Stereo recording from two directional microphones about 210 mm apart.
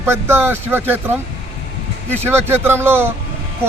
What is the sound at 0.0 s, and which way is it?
A man's voice, 10° right (ahead or behind).